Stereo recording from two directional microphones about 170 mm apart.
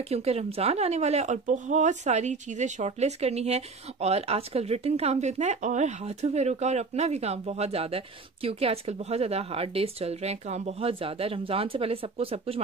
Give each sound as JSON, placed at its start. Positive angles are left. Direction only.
{"t": 0.1, "sound": "speech", "side_deg": -40}